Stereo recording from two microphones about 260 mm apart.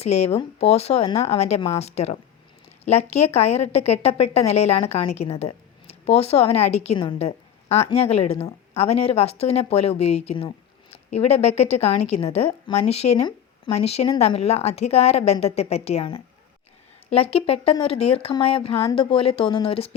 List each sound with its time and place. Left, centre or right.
0.0 s a woman's voice: left